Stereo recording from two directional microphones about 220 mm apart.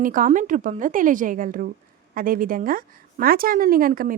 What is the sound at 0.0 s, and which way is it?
A woman's voice, 35° right (ahead or behind).